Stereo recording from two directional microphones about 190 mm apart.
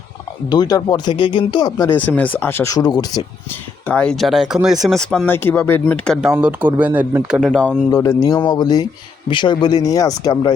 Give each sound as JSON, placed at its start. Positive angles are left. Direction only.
{"t": 0.4, "sound": "speech", "side_deg": 20}
{"t": 3.5, "sound": "speech", "side_deg": 5}
{"t": 6.2, "sound": "speech", "side_deg": -5}
{"t": 7.9, "sound": "speech", "side_deg": 20}